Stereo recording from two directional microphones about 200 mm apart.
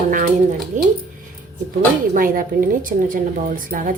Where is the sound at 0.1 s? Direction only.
40° right (ahead or behind).